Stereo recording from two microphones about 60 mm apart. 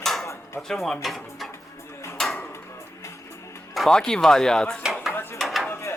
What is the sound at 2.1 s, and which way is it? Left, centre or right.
Dishes, centre.